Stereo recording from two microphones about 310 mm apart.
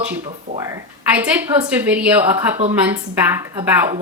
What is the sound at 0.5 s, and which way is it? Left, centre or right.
A woman's voice, centre.